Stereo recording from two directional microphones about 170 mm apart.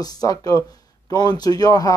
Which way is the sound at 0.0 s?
20° left (ahead or behind).